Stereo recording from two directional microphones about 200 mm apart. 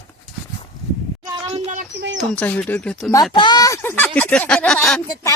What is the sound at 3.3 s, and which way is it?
A woman's voice, 20° left (ahead or behind).